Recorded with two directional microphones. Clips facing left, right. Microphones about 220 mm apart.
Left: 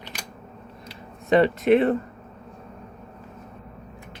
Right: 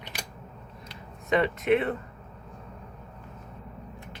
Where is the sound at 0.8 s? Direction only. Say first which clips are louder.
Left 6 dB; 35° left (ahead or behind).